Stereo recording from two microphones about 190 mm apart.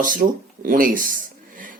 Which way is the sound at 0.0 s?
45° right (ahead or behind).